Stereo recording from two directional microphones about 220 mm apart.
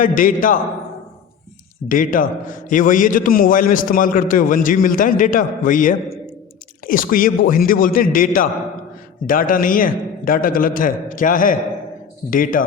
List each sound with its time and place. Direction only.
0.0 s a man's voice: 40° left (ahead or behind)
1.9 s a man's voice: 40° left (ahead or behind)